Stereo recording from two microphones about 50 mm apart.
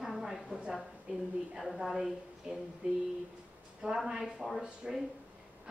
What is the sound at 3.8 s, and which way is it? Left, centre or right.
A woman's voice, centre.